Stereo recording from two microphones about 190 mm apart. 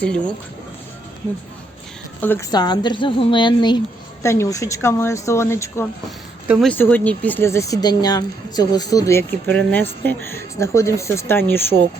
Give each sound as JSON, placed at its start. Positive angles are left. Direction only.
{"t": 0.0, "sound": "speech", "side_deg": 5}
{"t": 2.2, "sound": "speech", "side_deg": 10}
{"t": 2.5, "sound": "a woman's voice", "side_deg": 20}
{"t": 6.5, "sound": "speech", "side_deg": 5}